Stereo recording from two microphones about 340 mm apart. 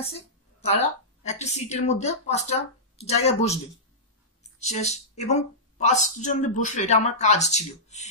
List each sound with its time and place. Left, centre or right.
0.1 s a woman's voice: centre